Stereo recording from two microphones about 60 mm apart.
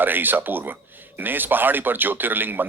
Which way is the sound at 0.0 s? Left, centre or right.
Right.